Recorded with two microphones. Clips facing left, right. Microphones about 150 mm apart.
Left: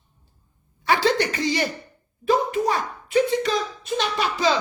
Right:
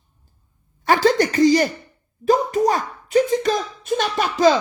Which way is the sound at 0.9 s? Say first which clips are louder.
Right 4 dB; 45° right (ahead or behind).